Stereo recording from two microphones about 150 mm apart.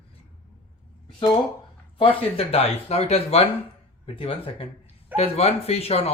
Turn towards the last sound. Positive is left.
turn(degrees=40)  # may be behind; listen again after turning